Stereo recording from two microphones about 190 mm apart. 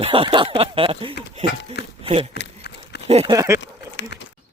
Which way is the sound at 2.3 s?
60° left (ahead or behind).